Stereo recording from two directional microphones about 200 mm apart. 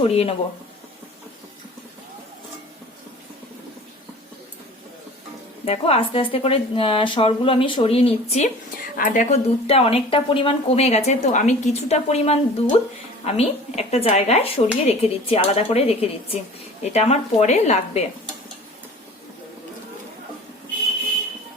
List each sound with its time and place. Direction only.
0.0 s a woman's voice: 30° left (ahead or behind)
5.6 s a woman's voice: 30° left (ahead or behind)